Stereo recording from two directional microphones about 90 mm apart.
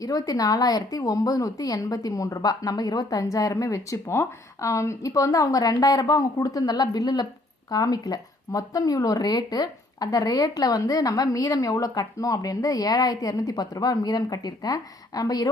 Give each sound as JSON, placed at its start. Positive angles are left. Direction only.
{"t": 0.0, "sound": "speech", "side_deg": 45}